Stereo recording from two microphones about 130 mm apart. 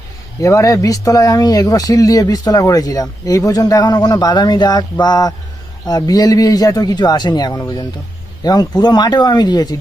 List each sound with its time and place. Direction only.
0.4 s speech: 25° left (ahead or behind)